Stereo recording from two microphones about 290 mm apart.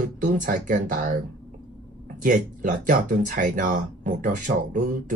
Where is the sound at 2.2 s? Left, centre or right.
Right.